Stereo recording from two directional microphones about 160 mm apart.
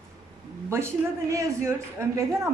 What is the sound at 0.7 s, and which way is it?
A woman's voice, 15° right (ahead or behind).